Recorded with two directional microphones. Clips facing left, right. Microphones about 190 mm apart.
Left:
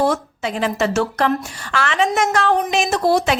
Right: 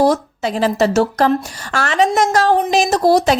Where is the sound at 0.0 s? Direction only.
35° right (ahead or behind).